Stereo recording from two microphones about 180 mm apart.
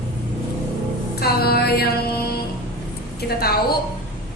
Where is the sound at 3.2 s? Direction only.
60° left (ahead or behind).